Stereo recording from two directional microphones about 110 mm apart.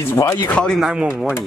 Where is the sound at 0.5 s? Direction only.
5° left (ahead or behind).